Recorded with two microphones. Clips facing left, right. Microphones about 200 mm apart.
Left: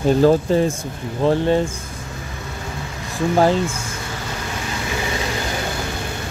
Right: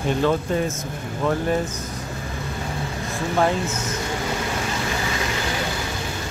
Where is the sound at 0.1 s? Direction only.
35° left (ahead or behind).